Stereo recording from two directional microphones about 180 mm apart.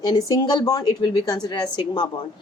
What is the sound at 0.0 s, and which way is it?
Speech, 20° left (ahead or behind).